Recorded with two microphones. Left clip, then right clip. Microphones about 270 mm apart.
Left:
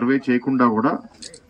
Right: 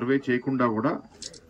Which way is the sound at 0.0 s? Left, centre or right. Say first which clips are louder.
Left 5 dB; left.